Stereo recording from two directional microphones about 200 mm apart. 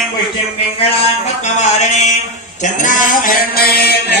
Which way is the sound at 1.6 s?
35° left (ahead or behind).